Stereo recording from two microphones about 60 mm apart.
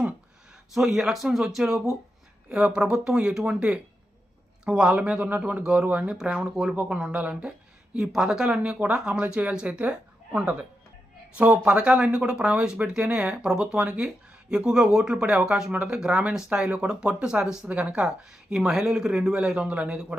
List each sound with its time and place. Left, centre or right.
0.7 s speech: centre
4.6 s speech: centre
7.9 s speech: centre; by 18.0 s right
18.0 s speech: centre